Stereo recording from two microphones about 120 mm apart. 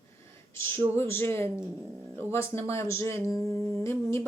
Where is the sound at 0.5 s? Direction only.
20° left (ahead or behind).